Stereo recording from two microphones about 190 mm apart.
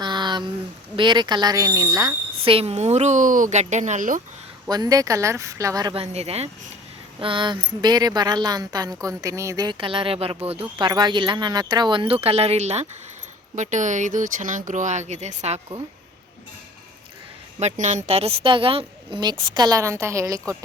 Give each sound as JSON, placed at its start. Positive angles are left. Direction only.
{"t": 0.0, "sound": "a sound", "side_deg": -25}
{"t": 0.9, "sound": "a woman's voice", "side_deg": -25}
{"t": 4.7, "sound": "a woman's voice", "side_deg": -20}
{"t": 17.6, "sound": "speech", "side_deg": -35}